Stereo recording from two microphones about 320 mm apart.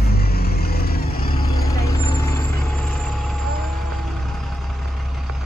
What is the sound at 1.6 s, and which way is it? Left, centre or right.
Vehicle, centre.